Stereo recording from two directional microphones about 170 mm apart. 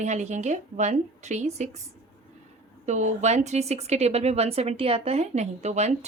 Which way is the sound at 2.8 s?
45° right (ahead or behind).